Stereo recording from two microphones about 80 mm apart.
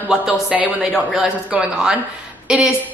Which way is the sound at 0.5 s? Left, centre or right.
Centre.